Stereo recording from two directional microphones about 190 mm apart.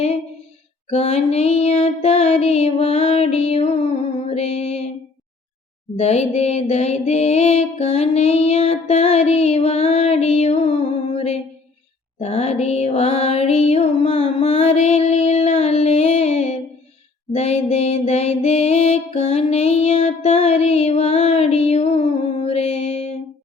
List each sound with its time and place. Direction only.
0.9 s music: 35° left (ahead or behind)
6.0 s music: 35° left (ahead or behind)